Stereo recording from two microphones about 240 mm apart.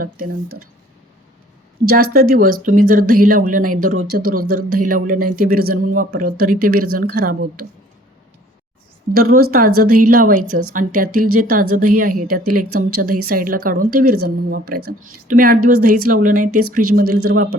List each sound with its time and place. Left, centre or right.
0.0 s speech: right
1.8 s speech: right
9.1 s speech: right
12.4 s speech: right
13.2 s speech: right
16.5 s speech: right
16.7 s speech: right